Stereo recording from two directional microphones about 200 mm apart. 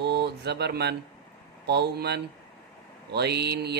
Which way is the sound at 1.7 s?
55° right (ahead or behind).